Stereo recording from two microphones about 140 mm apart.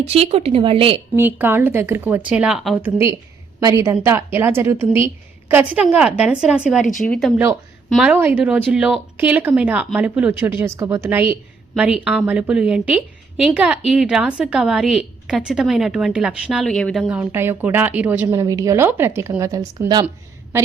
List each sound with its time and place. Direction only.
0.1 s speech: 45° right (ahead or behind)
1.1 s a woman's voice: 15° right (ahead or behind)
2.8 s a woman's voice: 20° right (ahead or behind); by 7.3 s centre (ahead or behind)
7.3 s a woman's voice: 20° right (ahead or behind)
7.9 s speech: centre (ahead or behind)
8.1 s a woman's voice: 15° right (ahead or behind)
18.3 s a woman's voice: 25° right (ahead or behind)